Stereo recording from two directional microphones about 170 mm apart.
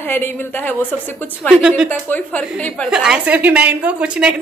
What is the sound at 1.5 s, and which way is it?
Speech, 5° right (ahead or behind).